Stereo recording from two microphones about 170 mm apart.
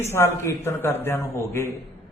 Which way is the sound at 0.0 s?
15° left (ahead or behind).